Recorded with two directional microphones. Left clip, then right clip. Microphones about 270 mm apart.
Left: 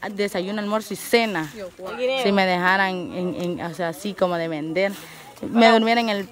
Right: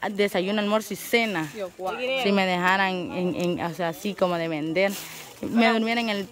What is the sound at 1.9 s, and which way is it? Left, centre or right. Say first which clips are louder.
Speech: left 4 dB; left.